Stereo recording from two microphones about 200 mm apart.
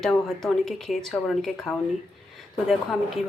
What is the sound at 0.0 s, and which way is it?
Speech, centre (ahead or behind).